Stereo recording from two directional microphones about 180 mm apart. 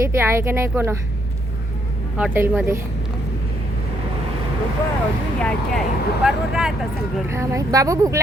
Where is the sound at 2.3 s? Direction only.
10° right (ahead or behind).